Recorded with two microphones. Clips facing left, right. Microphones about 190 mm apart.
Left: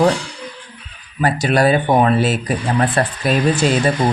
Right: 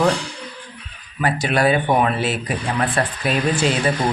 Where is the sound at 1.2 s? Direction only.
40° left (ahead or behind).